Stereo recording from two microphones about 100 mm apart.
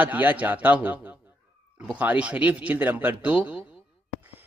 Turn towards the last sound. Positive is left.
turn(degrees=-15)  # may be behind; listen again after turning